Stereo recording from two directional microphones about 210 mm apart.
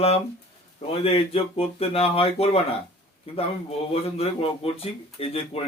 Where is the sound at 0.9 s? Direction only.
25° left (ahead or behind).